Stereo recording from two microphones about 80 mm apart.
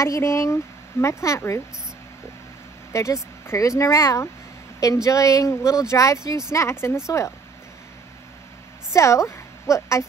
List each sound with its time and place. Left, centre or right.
0.0 s speech: left
2.9 s speech: left
8.9 s a woman's voice: left